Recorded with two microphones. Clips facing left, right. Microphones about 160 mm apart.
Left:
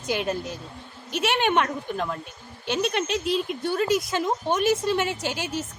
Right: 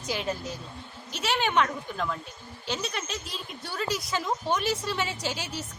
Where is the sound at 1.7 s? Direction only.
40° left (ahead or behind).